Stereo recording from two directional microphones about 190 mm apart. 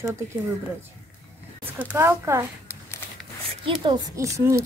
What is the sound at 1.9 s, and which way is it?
Speech, 15° right (ahead or behind).